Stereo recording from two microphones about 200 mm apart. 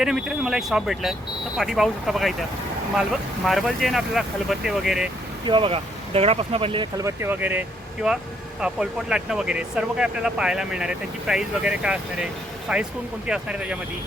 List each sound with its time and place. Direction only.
0.0 s speech: centre (ahead or behind)
3.4 s speech: centre (ahead or behind)
5.5 s speech: 25° right (ahead or behind); by 7.6 s 10° right (ahead or behind)
8.6 s speech: 5° right (ahead or behind)